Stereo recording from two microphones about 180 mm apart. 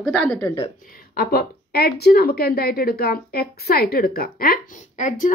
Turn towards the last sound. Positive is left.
turn(degrees=45)  # may be behind; listen again after turning